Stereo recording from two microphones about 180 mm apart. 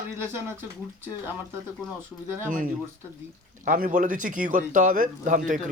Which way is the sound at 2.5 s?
50° right (ahead or behind).